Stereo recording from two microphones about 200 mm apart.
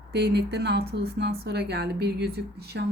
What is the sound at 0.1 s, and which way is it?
A woman's voice, 55° right (ahead or behind).